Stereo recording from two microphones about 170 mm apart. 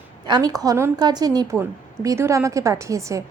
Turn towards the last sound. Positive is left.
turn(degrees=-20)  # may be behind; listen again after turning